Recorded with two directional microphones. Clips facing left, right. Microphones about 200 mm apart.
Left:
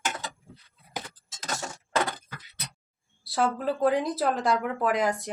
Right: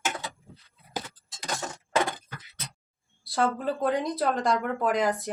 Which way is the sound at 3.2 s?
Centre (ahead or behind).